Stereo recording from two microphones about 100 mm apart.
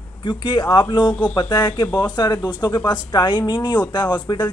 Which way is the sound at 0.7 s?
45° left (ahead or behind).